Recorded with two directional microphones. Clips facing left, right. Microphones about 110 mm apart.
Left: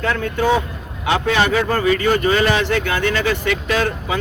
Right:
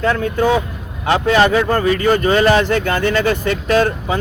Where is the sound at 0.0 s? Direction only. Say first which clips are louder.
Right 3 dB; 35° right (ahead or behind).